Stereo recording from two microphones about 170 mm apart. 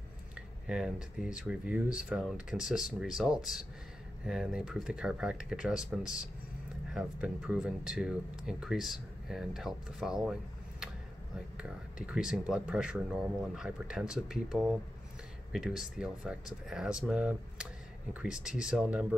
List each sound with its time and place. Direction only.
0.7 s speech: 5° right (ahead or behind)